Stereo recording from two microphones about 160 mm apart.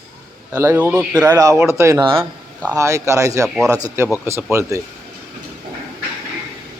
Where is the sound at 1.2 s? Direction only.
20° right (ahead or behind).